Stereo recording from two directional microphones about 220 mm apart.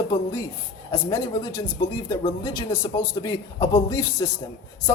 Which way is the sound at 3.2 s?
15° left (ahead or behind).